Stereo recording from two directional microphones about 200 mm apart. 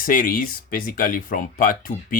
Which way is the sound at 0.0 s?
45° left (ahead or behind).